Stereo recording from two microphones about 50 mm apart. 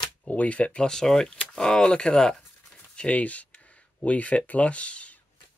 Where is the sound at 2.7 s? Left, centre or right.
Left.